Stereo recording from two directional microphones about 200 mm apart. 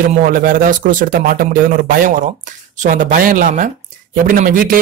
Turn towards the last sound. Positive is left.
turn(degrees=-45)  # may be behind; listen again after turning